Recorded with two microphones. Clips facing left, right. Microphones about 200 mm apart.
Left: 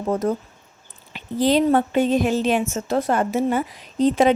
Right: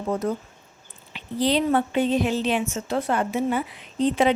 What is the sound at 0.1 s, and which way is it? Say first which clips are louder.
A woman's voice: left 4 dB; 45° left (ahead or behind).